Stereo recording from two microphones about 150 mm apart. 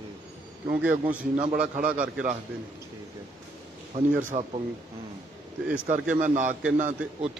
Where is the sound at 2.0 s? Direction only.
60° right (ahead or behind).